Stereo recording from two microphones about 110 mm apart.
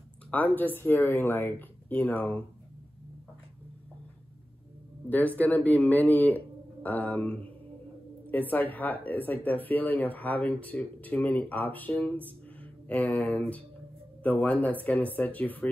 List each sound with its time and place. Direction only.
0.3 s speech: 15° left (ahead or behind)
5.1 s speech: 15° left (ahead or behind)